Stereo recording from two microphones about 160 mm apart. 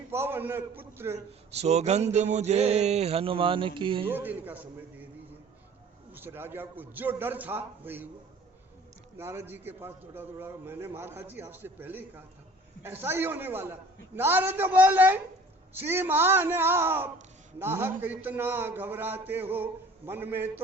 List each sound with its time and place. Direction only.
0.1 s a man's voice: 15° right (ahead or behind)
1.5 s speech: 45° right (ahead or behind)
4.0 s a man's voice: 10° right (ahead or behind)
6.1 s a man's voice: 15° right (ahead or behind)
9.1 s a man's voice: 15° right (ahead or behind)